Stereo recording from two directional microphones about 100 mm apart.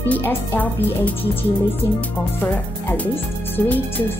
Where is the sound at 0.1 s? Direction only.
20° left (ahead or behind).